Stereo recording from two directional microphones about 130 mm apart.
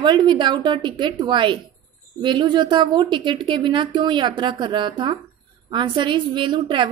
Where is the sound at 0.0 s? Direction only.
35° right (ahead or behind).